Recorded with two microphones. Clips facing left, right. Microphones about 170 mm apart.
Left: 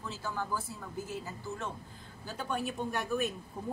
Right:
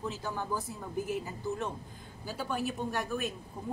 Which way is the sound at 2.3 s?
5° right (ahead or behind).